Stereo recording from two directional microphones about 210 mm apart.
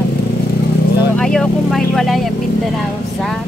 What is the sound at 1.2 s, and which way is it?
Vehicle, 5° left (ahead or behind).